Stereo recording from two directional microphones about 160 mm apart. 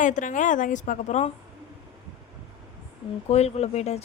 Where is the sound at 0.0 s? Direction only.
50° left (ahead or behind).